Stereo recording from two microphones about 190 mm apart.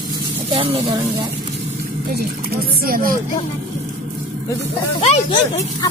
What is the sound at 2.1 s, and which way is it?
Speech, 55° right (ahead or behind).